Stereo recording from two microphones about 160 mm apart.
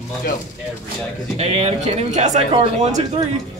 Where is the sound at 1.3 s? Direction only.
40° right (ahead or behind).